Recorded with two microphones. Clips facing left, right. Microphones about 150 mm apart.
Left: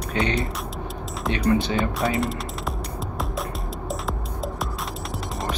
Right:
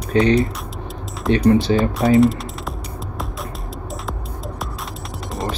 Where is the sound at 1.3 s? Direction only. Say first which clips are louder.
Right 7 dB; 35° right (ahead or behind).